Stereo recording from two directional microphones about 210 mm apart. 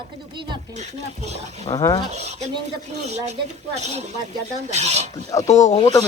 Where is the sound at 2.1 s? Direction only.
30° right (ahead or behind).